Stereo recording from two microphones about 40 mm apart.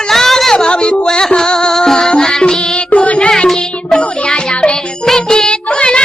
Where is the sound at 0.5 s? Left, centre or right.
Left.